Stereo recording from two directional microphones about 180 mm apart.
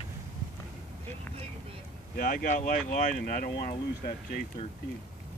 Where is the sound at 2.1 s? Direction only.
55° left (ahead or behind).